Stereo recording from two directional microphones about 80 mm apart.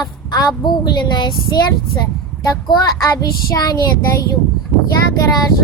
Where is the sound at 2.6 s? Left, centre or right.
Left.